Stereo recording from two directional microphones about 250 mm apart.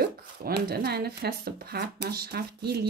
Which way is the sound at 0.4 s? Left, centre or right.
Right.